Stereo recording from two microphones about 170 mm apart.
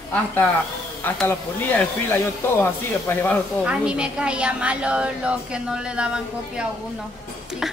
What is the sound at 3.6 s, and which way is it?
A woman's voice, 5° right (ahead or behind).